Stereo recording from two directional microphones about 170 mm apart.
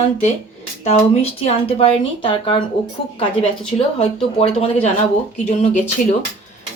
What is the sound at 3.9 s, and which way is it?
Speech, 35° left (ahead or behind).